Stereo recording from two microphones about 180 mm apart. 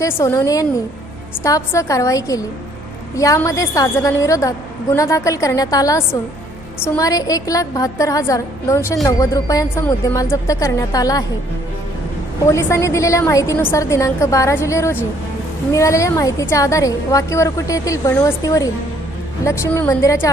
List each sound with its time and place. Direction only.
0.0 s a woman's voice: 15° left (ahead or behind)
12.5 s a woman's voice: 15° left (ahead or behind)